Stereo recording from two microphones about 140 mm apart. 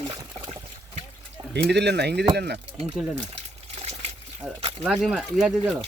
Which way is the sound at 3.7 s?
45° right (ahead or behind).